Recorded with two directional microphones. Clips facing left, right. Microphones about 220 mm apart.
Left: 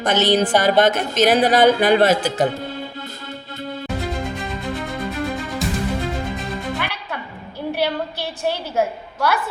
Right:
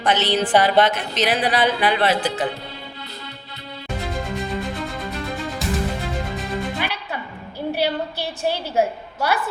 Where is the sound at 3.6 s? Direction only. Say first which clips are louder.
Left 8 dB; 50° left (ahead or behind).